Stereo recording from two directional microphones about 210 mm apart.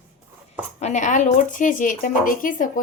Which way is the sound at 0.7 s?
35° left (ahead or behind).